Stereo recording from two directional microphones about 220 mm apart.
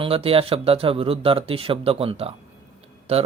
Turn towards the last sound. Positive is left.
turn(degrees=-25)  # may be behind; listen again after turning